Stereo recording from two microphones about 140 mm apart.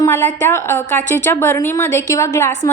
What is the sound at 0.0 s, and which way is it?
A woman's voice, 15° left (ahead or behind).